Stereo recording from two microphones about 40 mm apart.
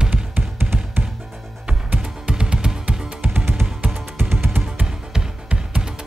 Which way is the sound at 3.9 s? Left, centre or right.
Right.